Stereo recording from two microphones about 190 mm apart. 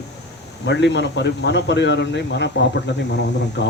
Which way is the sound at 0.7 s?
65° left (ahead or behind).